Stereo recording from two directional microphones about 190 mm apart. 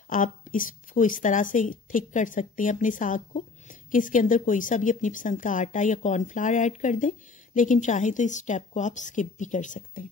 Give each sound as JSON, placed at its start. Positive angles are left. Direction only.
{"t": 0.1, "sound": "a woman's voice", "side_deg": 45}